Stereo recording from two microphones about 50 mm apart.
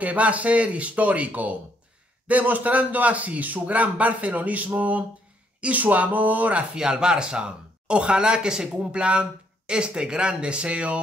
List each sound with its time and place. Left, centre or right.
0.0 s a man's voice: right
6.7 s speech: centre